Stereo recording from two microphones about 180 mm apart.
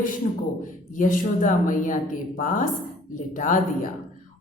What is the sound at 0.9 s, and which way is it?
A woman's voice, 45° left (ahead or behind).